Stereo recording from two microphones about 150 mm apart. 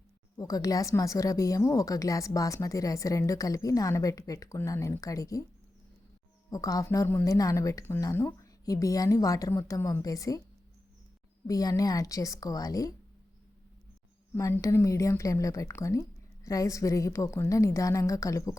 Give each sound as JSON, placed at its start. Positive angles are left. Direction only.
{"t": 0.3, "sound": "a woman's voice", "side_deg": 25}
{"t": 6.5, "sound": "a woman's voice", "side_deg": 25}
{"t": 11.4, "sound": "a woman's voice", "side_deg": 25}
{"t": 14.3, "sound": "a woman's voice", "side_deg": 20}